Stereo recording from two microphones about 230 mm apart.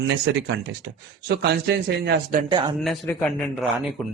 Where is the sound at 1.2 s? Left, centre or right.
Right.